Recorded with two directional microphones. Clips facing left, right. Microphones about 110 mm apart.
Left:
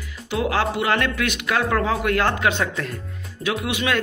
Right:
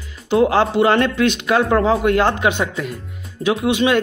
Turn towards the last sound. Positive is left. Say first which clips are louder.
# right 7 dB
turn(degrees=-25)  # may be behind; listen again after turning